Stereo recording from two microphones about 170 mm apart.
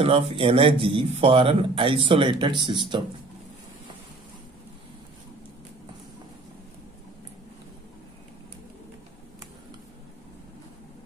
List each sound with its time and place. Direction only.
0.0 s a man's voice: 35° right (ahead or behind)